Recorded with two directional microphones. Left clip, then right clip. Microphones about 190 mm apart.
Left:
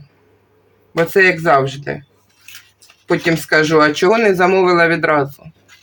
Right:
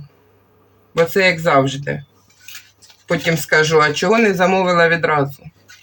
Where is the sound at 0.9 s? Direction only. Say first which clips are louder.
Left 2 dB; 40° left (ahead or behind).